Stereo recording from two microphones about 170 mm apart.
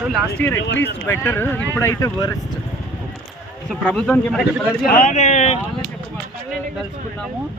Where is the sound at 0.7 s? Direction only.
90° left.